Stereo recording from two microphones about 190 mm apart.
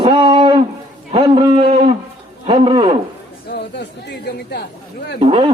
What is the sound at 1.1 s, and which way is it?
A man's voice, 30° right (ahead or behind).